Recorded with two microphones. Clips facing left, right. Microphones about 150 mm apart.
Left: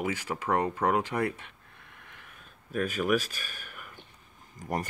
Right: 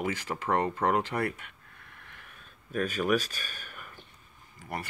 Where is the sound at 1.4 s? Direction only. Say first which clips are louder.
Even; 25° left (ahead or behind).